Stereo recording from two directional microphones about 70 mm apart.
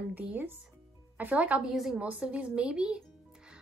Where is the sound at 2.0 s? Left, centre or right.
Centre.